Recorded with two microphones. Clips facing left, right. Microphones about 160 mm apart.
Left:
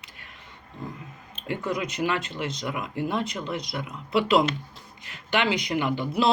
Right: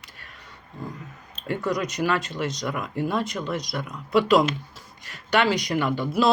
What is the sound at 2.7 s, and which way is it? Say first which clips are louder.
Speech: even; 10° left (ahead or behind).